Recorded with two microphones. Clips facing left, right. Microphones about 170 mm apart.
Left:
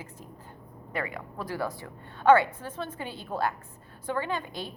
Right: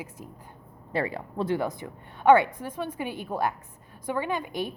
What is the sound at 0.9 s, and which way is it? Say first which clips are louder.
A woman's voice: right 5 dB; 30° right (ahead or behind).